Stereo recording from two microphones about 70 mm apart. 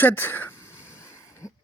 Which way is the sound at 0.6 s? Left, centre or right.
Left.